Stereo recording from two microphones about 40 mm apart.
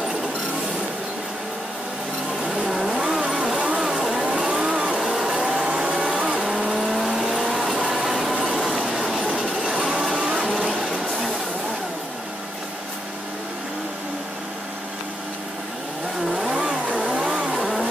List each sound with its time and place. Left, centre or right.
2.7 s vehicle: centre
3.0 s vehicle: centre
3.6 s a sound: centre
4.1 s vehicle: centre
5.1 s a sound: centre
5.9 s vehicle: centre
7.3 s music: centre
7.9 s a sound: centre
8.6 s train: centre
16.3 s vehicle: centre
16.9 s vehicle: right
17.5 s vehicle: centre